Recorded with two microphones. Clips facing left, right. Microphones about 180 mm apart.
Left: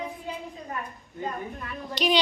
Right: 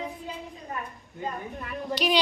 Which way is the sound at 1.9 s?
5° right (ahead or behind).